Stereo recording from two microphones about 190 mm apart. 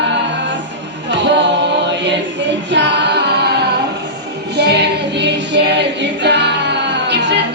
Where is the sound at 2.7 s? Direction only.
65° right (ahead or behind).